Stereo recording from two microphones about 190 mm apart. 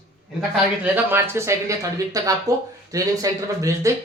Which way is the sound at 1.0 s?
10° right (ahead or behind).